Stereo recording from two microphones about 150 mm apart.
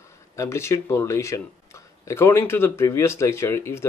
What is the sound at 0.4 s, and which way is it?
Speech, 20° left (ahead or behind).